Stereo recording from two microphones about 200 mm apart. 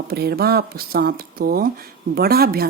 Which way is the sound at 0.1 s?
50° right (ahead or behind).